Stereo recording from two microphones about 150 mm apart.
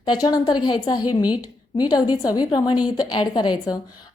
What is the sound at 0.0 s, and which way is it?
A woman's voice, 25° left (ahead or behind).